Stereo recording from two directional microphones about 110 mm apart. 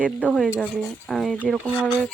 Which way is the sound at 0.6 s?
5° left (ahead or behind).